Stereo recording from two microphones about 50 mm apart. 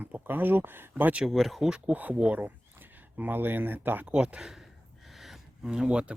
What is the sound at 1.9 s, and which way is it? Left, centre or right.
Speech, right.